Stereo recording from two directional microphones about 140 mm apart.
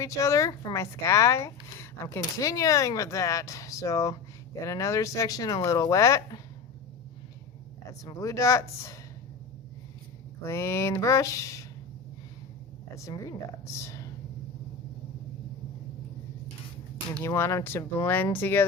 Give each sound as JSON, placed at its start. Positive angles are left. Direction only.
{"t": 0.0, "sound": "speech", "side_deg": 20}
{"t": 8.0, "sound": "speech", "side_deg": 25}
{"t": 10.4, "sound": "speech", "side_deg": 20}
{"t": 13.1, "sound": "speech", "side_deg": 25}
{"t": 17.2, "sound": "speech", "side_deg": 20}